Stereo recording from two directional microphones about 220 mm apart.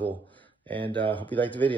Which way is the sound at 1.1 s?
5° left (ahead or behind).